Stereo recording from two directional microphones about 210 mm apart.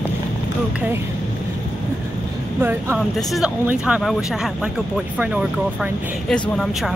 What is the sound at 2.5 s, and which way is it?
Speech, 10° right (ahead or behind).